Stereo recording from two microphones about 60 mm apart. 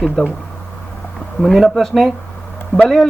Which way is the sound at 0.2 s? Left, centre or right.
Centre.